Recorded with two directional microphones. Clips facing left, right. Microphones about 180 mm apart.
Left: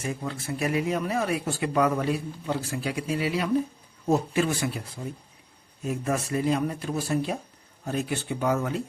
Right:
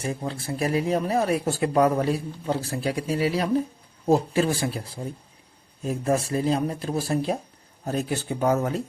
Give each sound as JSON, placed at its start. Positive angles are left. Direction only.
{"t": 0.0, "sound": "speech", "side_deg": -35}